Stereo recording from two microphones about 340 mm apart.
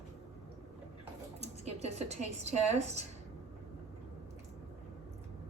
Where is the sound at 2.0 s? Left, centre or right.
Centre.